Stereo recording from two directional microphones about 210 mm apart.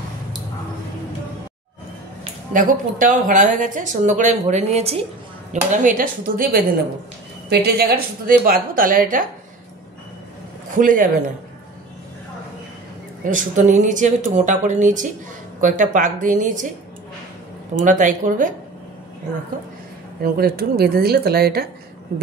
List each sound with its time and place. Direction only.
2.5 s a woman's voice: 40° right (ahead or behind)
10.8 s speech: 40° right (ahead or behind)
13.2 s speech: 35° right (ahead or behind)
17.7 s speech: 40° right (ahead or behind)
20.2 s a woman's voice: 45° right (ahead or behind)